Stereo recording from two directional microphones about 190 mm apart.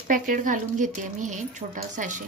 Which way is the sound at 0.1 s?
45° right (ahead or behind).